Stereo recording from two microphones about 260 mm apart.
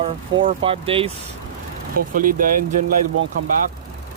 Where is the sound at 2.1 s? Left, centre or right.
Right.